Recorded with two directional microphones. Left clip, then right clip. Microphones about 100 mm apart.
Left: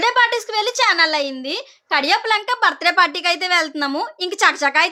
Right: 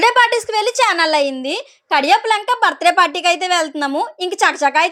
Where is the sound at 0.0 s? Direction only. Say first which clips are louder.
Right 4 dB; 50° right (ahead or behind).